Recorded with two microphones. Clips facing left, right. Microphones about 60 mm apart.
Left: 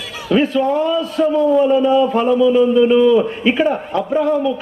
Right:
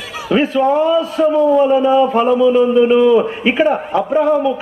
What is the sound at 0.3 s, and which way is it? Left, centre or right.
A man's voice, centre.